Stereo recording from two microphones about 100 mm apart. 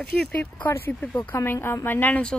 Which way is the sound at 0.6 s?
20° left (ahead or behind).